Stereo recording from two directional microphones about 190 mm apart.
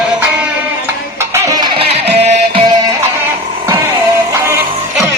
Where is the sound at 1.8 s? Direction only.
30° right (ahead or behind).